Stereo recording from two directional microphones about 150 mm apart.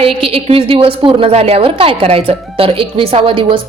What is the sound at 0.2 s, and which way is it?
A woman's voice, 40° right (ahead or behind).